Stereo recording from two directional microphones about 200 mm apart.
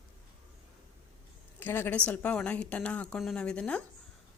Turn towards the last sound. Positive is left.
turn(degrees=5)  # may be behind; listen again after turning